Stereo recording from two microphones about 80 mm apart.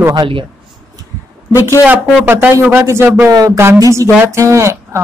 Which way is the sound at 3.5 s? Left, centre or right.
Right.